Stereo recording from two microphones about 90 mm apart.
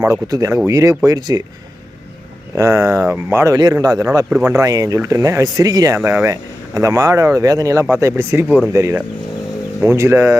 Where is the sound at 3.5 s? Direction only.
50° right (ahead or behind).